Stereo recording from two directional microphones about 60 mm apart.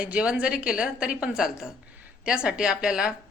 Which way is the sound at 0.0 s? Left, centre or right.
Centre.